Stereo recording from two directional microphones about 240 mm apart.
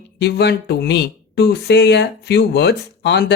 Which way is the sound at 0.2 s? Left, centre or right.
Left.